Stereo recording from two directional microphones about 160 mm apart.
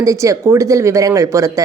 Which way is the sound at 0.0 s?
20° right (ahead or behind).